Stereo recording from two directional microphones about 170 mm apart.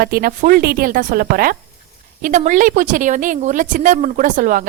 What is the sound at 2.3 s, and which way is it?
A woman's voice, 45° right (ahead or behind).